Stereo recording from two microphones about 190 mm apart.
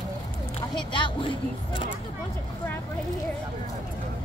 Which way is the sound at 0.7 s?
25° left (ahead or behind).